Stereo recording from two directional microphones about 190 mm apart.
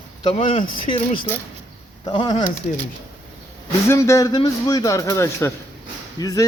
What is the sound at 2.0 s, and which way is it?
Speech, 20° left (ahead or behind).